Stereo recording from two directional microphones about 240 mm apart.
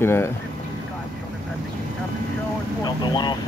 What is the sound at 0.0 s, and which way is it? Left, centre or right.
Speech, centre.